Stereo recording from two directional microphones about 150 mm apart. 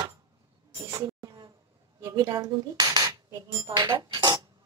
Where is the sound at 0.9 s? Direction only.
25° right (ahead or behind).